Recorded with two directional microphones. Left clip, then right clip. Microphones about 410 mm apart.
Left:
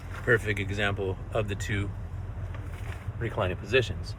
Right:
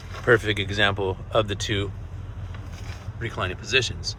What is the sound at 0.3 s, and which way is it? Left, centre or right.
Speech, centre.